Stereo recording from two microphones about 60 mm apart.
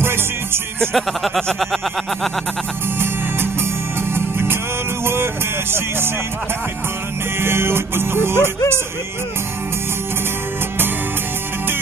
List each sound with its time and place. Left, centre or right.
0.9 s speech: centre
4.1 s music: right
7.3 s music: right